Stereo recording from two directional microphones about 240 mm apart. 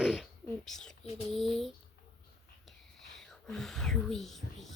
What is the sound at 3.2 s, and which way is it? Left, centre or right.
Speech, centre.